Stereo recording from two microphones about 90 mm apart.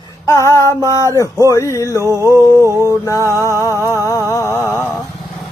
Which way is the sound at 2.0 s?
40° right (ahead or behind).